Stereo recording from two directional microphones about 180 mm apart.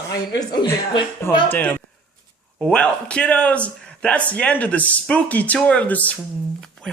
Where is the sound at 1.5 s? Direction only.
10° left (ahead or behind).